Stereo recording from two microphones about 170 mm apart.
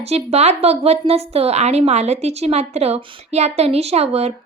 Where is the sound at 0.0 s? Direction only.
40° right (ahead or behind).